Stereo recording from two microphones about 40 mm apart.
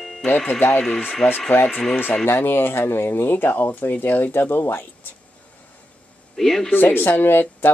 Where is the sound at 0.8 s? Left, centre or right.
Centre.